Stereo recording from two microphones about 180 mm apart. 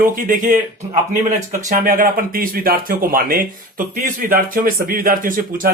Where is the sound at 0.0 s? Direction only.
50° right (ahead or behind).